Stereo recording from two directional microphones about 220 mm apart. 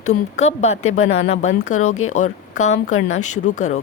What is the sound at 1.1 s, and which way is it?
Speech, 30° left (ahead or behind).